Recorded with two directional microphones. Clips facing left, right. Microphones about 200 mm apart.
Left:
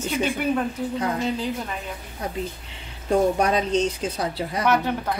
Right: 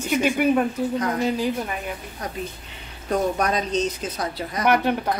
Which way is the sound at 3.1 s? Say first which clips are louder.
Left 3 dB; 30° left (ahead or behind).